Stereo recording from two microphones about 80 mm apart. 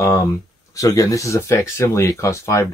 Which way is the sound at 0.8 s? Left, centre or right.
Left.